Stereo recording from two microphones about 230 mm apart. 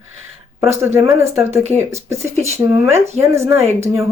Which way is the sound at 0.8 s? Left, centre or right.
Centre.